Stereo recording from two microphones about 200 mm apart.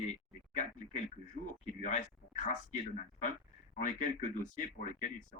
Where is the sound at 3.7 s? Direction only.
40° left (ahead or behind).